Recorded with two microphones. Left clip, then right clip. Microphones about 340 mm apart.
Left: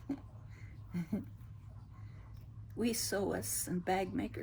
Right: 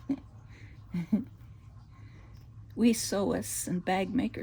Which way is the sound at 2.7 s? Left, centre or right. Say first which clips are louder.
Right 7 dB; right.